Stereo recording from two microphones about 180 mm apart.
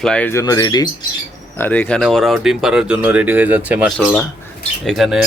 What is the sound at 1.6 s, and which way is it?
Speech, 10° left (ahead or behind).